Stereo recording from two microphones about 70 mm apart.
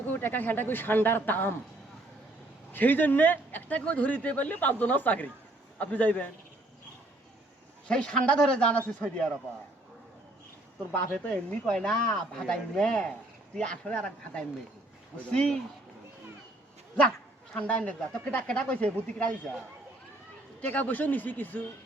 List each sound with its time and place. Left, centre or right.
0.1 s speech: left
2.7 s speech: left
7.9 s speech: centre
10.9 s speech: centre
17.5 s speech: centre
20.6 s speech: left